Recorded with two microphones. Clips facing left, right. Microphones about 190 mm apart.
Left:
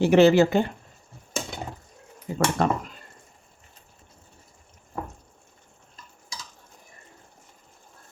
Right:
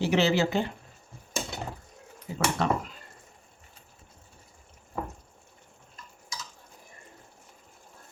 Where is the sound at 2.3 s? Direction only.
45° left (ahead or behind).